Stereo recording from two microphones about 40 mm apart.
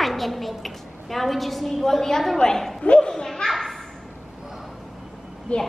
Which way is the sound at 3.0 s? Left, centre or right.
Centre.